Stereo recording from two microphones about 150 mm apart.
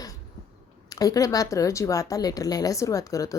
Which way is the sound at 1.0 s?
25° left (ahead or behind).